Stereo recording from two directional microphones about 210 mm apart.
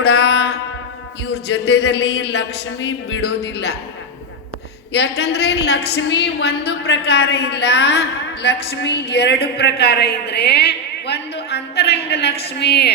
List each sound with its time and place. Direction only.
0.0 s music: 50° left (ahead or behind)
1.3 s a woman's voice: 55° left (ahead or behind)
4.9 s a woman's voice: 50° left (ahead or behind)